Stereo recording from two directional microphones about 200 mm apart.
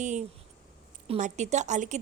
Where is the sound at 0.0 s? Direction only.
35° right (ahead or behind).